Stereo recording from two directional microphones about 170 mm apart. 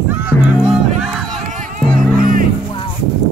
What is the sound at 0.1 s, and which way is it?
Honk, 10° right (ahead or behind).